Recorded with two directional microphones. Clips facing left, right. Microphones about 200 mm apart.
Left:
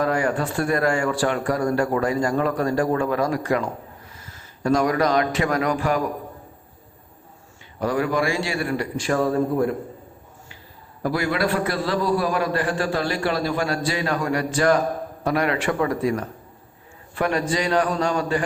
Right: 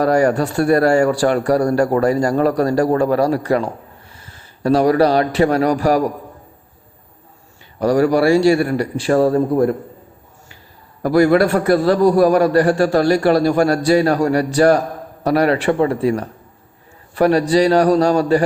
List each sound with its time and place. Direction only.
0.0 s a man's voice: 40° right (ahead or behind)
7.8 s a man's voice: 40° right (ahead or behind)
11.0 s a man's voice: 45° right (ahead or behind)